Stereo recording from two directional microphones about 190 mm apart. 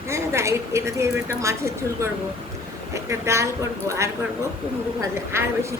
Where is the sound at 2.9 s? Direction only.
15° right (ahead or behind).